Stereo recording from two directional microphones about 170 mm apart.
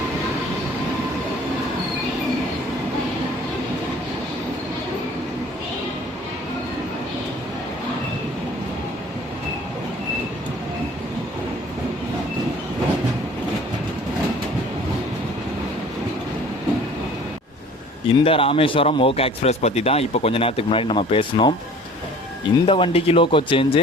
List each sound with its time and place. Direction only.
18.1 s speech: 35° left (ahead or behind)